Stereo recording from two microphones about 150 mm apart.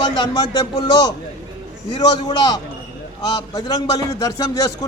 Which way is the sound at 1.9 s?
30° left (ahead or behind).